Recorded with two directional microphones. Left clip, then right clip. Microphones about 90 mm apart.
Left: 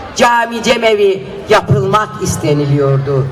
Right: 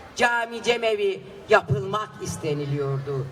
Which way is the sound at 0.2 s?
20° right (ahead or behind).